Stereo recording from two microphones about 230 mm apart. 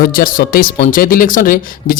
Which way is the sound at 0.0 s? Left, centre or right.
Left.